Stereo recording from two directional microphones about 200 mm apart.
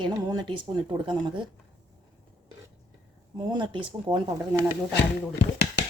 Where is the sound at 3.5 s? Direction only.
25° right (ahead or behind).